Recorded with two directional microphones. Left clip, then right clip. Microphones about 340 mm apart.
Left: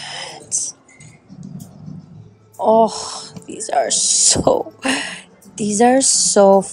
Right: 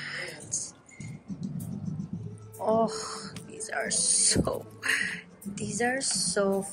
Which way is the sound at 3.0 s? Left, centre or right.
Left.